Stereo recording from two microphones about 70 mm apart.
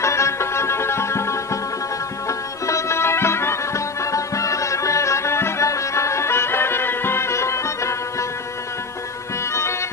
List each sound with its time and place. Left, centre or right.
0.0 s music: left
9.5 s music: left